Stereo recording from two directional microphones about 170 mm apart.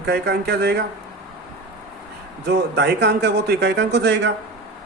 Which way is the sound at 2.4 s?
85° right.